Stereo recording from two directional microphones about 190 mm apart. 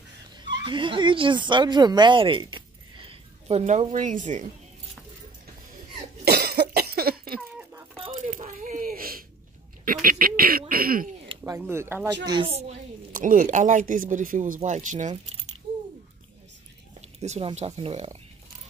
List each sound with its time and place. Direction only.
0.7 s speech: 25° right (ahead or behind); by 4.5 s 40° right (ahead or behind)
6.2 s cough: 55° right (ahead or behind)
8.1 s a sound: 40° right (ahead or behind)
10.0 s speech: 50° right (ahead or behind)
11.5 s speech: 15° right (ahead or behind)
12.3 s a woman's voice: 30° right (ahead or behind)
13.1 s speech: 45° right (ahead or behind)
17.2 s speech: 35° right (ahead or behind)